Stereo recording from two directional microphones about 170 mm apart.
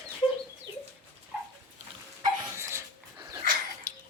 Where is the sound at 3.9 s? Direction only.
55° left (ahead or behind).